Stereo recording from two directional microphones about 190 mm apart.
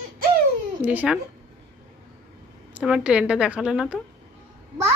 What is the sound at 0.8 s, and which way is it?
Speech, 10° right (ahead or behind).